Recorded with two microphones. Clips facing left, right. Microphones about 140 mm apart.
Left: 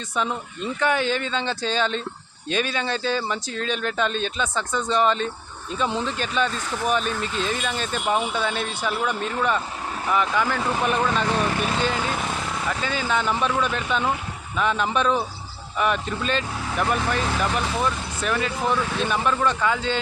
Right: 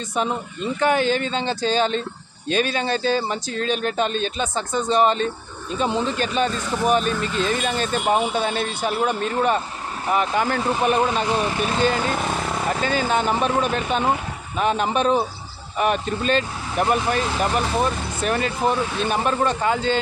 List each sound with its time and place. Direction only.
0.8 s speech: 45° right (ahead or behind)
10.6 s speech: 25° right (ahead or behind)
11.8 s speech: 45° right (ahead or behind)
16.7 s speech: 20° right (ahead or behind)
17.4 s speech: 40° right (ahead or behind)
18.6 s speech: 30° right (ahead or behind)
19.0 s speech: 45° right (ahead or behind)